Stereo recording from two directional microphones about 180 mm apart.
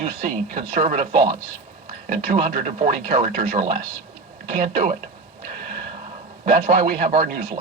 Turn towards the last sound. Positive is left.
turn(degrees=-45)  # may be behind; listen again after turning